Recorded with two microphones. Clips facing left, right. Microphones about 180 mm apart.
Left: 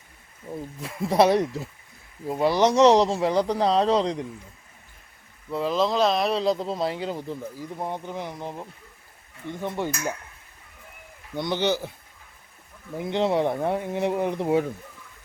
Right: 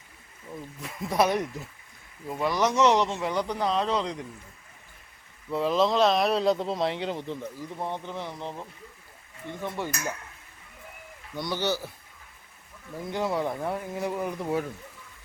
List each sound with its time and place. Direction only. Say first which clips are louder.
0.5 s speech: left 5 dB; 30° left (ahead or behind)
5.5 s speech: even; centre (ahead or behind); by 9.9 s 20° left (ahead or behind)
11.3 s speech: left 4 dB; 20° left (ahead or behind)
13.0 s speech: left 5 dB; 25° left (ahead or behind)